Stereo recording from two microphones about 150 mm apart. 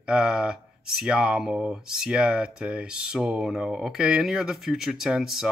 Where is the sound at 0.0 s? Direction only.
5° right (ahead or behind).